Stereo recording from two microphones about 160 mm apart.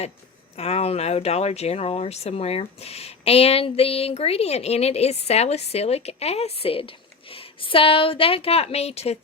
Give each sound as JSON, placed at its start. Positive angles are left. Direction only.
{"t": 0.5, "sound": "speech", "side_deg": 40}